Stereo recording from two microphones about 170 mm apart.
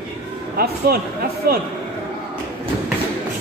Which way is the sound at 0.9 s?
65° right (ahead or behind).